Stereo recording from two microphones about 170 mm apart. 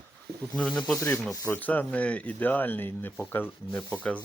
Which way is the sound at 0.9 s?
15° left (ahead or behind).